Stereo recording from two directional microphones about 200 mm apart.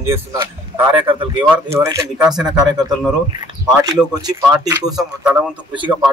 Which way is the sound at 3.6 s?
20° right (ahead or behind).